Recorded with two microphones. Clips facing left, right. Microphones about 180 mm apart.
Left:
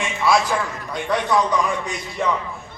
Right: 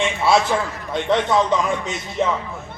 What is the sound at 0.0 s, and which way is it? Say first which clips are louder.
A man's voice: right 2 dB; 25° right (ahead or behind).